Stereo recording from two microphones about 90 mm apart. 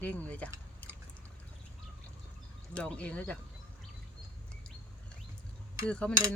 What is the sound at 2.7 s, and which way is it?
Speech, 15° left (ahead or behind).